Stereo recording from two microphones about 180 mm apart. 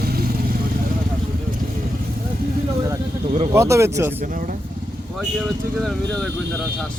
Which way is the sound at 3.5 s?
15° right (ahead or behind).